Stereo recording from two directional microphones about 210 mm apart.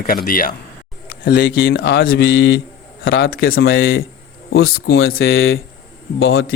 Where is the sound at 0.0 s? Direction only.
45° left (ahead or behind); by 4.0 s 65° left (ahead or behind).